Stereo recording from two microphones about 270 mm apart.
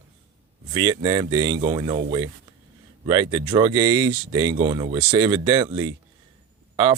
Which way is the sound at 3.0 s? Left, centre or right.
Centre.